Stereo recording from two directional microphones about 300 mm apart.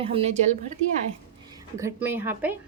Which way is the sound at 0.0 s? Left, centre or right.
Centre.